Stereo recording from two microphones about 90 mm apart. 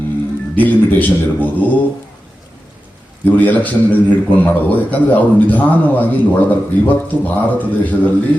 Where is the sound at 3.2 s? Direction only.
20° left (ahead or behind).